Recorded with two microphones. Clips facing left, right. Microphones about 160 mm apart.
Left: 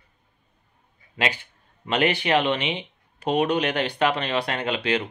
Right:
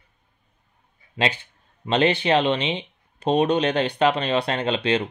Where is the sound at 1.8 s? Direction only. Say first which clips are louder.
Right 3 dB; 25° right (ahead or behind).